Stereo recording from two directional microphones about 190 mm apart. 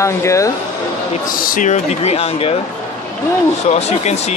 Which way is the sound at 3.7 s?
35° left (ahead or behind).